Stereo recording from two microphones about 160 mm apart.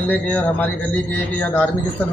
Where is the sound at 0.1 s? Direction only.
10° left (ahead or behind).